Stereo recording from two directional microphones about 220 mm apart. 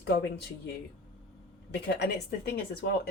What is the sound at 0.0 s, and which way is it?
Speech, 50° left (ahead or behind).